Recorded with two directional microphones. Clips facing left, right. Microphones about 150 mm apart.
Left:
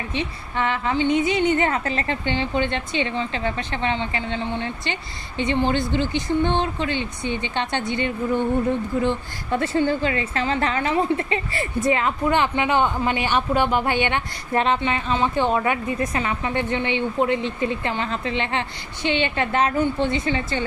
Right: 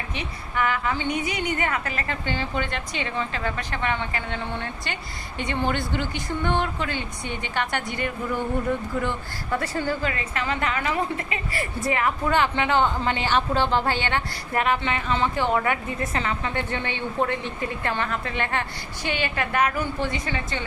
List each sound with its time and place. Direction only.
0.1 s a woman's voice: 25° left (ahead or behind)